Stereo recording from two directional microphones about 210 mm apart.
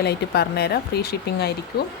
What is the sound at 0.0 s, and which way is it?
Speech, 50° left (ahead or behind).